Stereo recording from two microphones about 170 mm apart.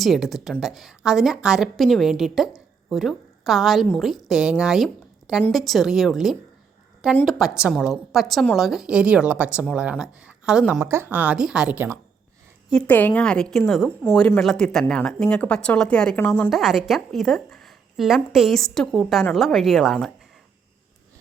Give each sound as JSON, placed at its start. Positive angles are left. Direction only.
{"t": 0.0, "sound": "a woman's voice", "side_deg": 0}
{"t": 10.8, "sound": "speech", "side_deg": -15}
{"t": 12.7, "sound": "a woman's voice", "side_deg": 10}
{"t": 14.0, "sound": "a woman's voice", "side_deg": 15}
{"t": 16.5, "sound": "a woman's voice", "side_deg": 0}